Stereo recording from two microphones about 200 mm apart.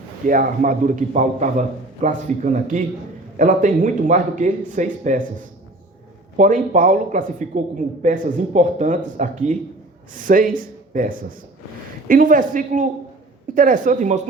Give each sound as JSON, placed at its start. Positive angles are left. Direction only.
{"t": 0.3, "sound": "a man's voice", "side_deg": -40}